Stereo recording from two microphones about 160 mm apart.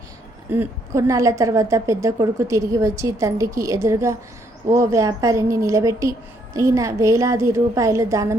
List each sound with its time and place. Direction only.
0.5 s a woman's voice: 15° right (ahead or behind)